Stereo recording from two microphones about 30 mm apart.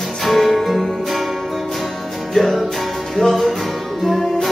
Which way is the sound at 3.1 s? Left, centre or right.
Centre.